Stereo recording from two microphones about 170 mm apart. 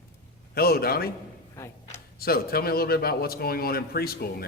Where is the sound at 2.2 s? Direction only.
60° left (ahead or behind).